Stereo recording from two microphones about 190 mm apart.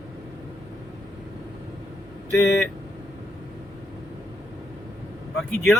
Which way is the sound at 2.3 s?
5° left (ahead or behind).